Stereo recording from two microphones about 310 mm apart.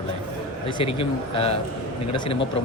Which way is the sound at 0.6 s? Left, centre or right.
Centre.